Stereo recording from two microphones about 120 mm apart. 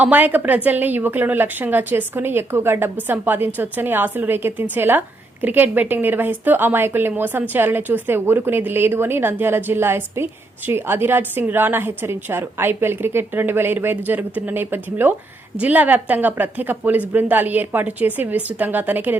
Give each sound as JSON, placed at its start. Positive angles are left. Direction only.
{"t": 0.0, "sound": "a woman's voice", "side_deg": -15}